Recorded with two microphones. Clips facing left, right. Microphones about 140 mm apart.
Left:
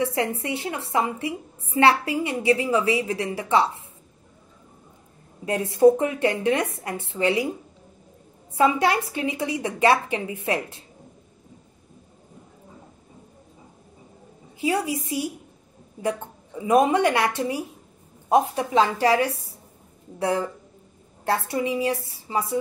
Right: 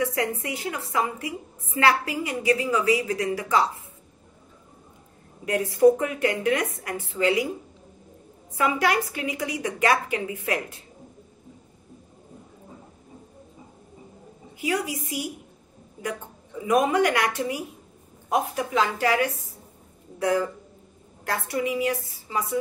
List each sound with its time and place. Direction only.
0.0 s a woman's voice: 30° left (ahead or behind)
5.4 s a woman's voice: 25° left (ahead or behind)
8.5 s a woman's voice: 25° left (ahead or behind)
14.6 s a woman's voice: 30° left (ahead or behind)
16.6 s a woman's voice: 30° left (ahead or behind)